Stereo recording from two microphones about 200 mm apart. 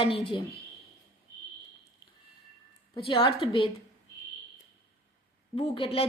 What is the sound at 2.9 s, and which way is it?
Speech, 25° left (ahead or behind).